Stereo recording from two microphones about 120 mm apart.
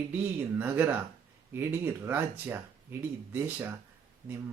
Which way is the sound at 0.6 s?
15° right (ahead or behind).